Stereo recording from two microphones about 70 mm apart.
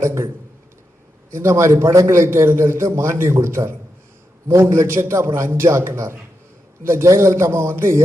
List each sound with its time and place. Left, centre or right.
0.0 s a man's voice: right
1.3 s a man's voice: right